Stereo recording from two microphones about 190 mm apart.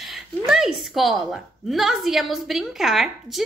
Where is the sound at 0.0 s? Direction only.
Centre (ahead or behind).